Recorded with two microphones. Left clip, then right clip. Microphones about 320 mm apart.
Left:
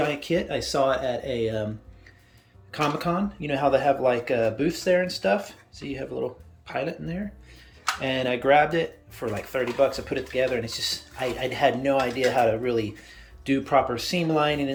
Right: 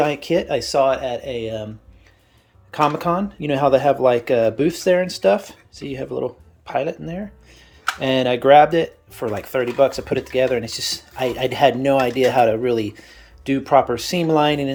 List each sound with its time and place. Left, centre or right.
0.0 s speech: centre
2.7 s speech: centre